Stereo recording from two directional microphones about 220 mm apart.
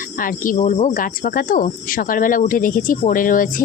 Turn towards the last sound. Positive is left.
turn(degrees=40)  # may be behind; listen again after turning